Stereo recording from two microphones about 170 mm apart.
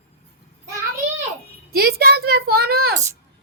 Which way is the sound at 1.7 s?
65° right (ahead or behind).